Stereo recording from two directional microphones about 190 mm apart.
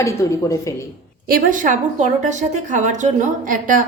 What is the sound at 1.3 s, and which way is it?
A woman's voice, 45° right (ahead or behind).